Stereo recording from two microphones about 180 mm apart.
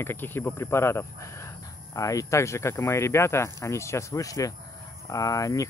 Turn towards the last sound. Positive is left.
turn(degrees=20)  # may be behind; listen again after turning